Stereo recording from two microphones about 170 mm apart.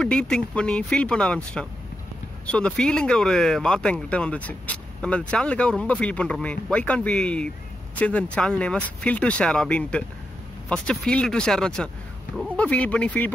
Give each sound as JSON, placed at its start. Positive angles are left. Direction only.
{"t": 0.0, "sound": "speech", "side_deg": 5}